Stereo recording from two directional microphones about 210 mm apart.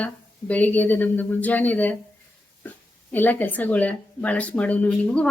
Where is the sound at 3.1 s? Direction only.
10° left (ahead or behind).